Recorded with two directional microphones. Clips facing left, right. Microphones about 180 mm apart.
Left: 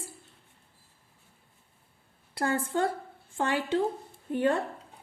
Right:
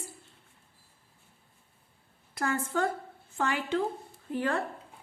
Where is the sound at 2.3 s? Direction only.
30° left (ahead or behind).